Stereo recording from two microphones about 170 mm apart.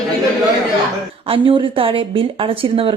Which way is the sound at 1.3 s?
30° right (ahead or behind).